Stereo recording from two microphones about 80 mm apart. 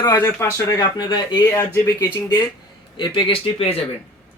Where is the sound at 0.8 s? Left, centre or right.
Left.